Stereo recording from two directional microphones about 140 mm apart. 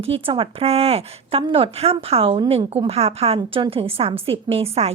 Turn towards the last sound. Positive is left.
turn(degrees=-45)  # may be behind; listen again after turning